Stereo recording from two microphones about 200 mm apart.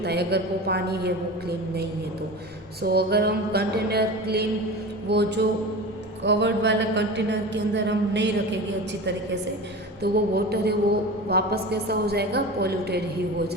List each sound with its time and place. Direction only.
0.0 s a woman's voice: 55° right (ahead or behind)